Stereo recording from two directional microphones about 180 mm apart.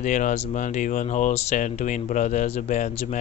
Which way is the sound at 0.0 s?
45° left (ahead or behind).